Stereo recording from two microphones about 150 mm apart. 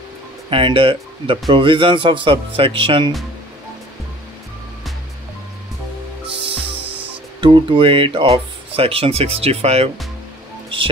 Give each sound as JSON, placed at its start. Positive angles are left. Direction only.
{"t": 0.5, "sound": "speech", "side_deg": -35}
{"t": 7.3, "sound": "speech", "side_deg": -35}